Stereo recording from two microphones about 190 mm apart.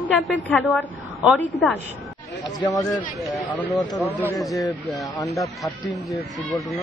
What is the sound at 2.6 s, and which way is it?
Speech, 20° left (ahead or behind).